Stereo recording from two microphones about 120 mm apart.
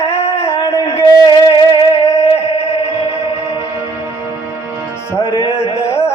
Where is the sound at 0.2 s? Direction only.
50° left (ahead or behind).